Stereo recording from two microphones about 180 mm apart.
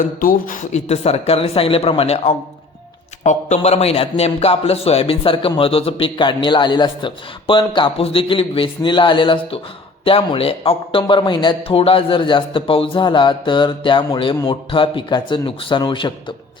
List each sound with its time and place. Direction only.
0.0 s a man's voice: 50° left (ahead or behind); by 16.1 s 25° left (ahead or behind)